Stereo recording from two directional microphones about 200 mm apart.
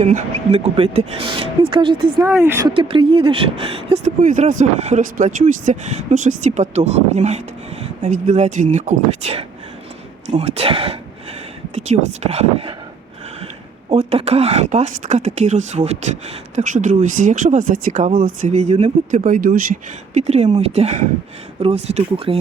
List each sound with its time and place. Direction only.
0.0 s speech: 35° right (ahead or behind)
2.1 s speech: 10° right (ahead or behind)
2.7 s speech: 25° right (ahead or behind)
13.9 s speech: 30° right (ahead or behind)